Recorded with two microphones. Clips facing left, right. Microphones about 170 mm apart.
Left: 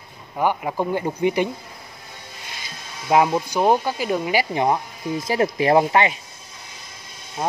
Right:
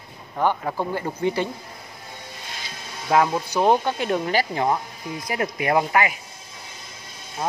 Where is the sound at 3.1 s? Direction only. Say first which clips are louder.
Left 2 dB; 15° left (ahead or behind).